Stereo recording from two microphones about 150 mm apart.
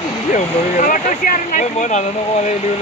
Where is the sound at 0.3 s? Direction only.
60° left (ahead or behind).